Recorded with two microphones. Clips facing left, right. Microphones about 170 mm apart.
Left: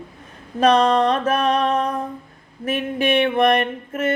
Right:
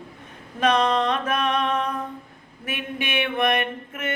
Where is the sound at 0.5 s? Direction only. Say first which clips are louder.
Left 5 dB; 35° left (ahead or behind).